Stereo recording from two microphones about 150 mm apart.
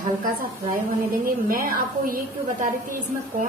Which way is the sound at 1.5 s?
75° right (ahead or behind).